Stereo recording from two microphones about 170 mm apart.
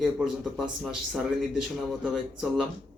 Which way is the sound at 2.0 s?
Centre (ahead or behind).